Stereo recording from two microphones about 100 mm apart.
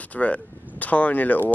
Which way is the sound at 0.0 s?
15° left (ahead or behind).